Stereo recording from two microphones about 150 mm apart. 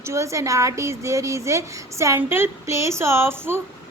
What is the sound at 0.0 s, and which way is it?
A woman's voice, 20° right (ahead or behind).